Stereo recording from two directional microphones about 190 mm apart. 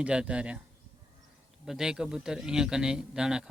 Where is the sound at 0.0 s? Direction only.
5° right (ahead or behind).